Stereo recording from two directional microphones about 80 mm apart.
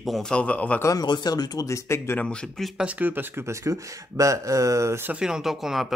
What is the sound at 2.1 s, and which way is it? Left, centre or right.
Speech, centre.